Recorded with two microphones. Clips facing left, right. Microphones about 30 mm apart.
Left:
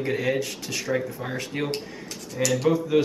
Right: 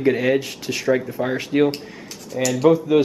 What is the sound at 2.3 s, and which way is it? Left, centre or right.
Speech, centre.